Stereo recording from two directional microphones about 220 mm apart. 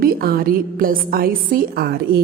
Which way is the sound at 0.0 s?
45° right (ahead or behind).